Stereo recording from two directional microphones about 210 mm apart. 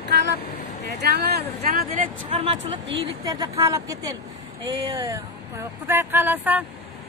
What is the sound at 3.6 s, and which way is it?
Speech, 15° right (ahead or behind).